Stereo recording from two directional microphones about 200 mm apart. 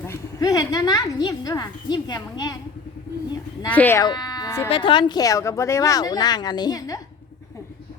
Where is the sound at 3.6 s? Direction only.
10° left (ahead or behind).